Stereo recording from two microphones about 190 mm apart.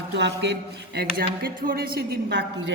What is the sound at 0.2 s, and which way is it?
Speech, 65° right (ahead or behind).